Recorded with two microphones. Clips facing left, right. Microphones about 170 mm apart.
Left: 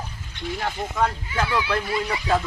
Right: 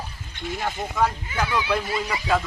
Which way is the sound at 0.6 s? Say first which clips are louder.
Right 1 dB; 5° right (ahead or behind).